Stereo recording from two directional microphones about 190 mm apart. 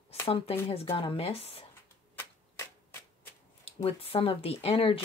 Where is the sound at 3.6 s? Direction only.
30° left (ahead or behind).